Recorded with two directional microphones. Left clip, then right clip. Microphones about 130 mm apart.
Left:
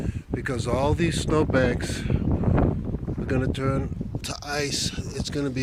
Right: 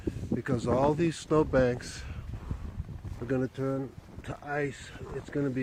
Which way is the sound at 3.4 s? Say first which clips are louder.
Left 5 dB; 40° left (ahead or behind).